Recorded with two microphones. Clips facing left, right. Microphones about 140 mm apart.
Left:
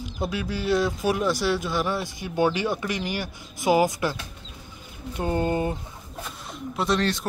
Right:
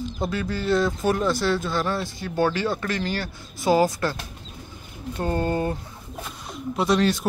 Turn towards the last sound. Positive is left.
turn(degrees=-5)  # may be behind; listen again after turning